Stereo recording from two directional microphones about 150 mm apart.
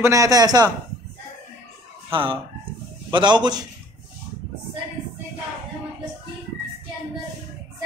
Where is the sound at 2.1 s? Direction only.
35° right (ahead or behind).